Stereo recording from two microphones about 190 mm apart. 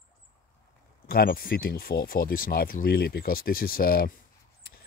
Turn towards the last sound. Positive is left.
turn(degrees=50)  # may be behind; listen again after turning